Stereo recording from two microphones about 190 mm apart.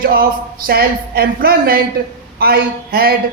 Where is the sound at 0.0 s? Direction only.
50° right (ahead or behind).